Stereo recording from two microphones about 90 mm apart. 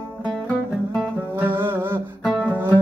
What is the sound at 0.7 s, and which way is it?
Music, 5° right (ahead or behind).